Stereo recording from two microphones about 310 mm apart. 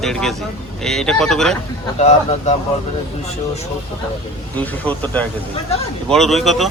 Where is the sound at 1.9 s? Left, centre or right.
Left.